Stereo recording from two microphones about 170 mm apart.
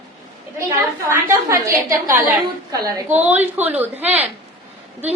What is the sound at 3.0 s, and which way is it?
A woman's voice, 10° right (ahead or behind).